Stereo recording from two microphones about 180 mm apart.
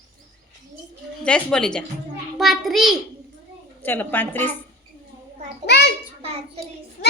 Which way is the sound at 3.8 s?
10° left (ahead or behind).